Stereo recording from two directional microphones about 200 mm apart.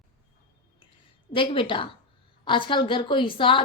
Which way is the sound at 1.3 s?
25° left (ahead or behind).